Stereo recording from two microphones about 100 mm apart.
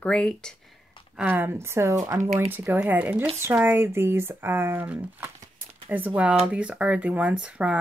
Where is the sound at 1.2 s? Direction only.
20° right (ahead or behind).